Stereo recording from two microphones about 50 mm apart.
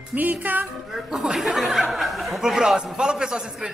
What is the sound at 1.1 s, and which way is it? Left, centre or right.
Speech, centre.